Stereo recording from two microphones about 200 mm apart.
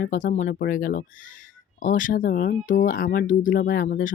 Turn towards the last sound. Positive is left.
turn(degrees=45)  # may be behind; listen again after turning